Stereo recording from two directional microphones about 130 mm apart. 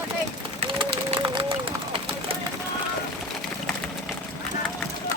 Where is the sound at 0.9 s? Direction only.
40° right (ahead or behind).